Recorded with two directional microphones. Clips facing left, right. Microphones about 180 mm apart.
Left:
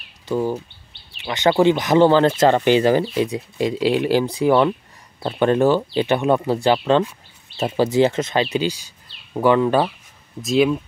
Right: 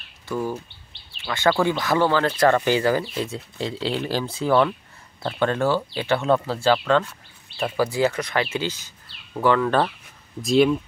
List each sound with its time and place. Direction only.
0.3 s speech: 20° left (ahead or behind)
10.4 s speech: centre (ahead or behind)